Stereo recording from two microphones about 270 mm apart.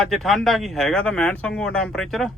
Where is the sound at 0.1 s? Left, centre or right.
Centre.